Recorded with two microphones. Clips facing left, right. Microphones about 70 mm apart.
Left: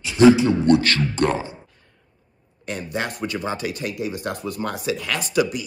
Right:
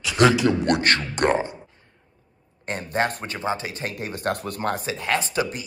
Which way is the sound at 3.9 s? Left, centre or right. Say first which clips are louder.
Even; right.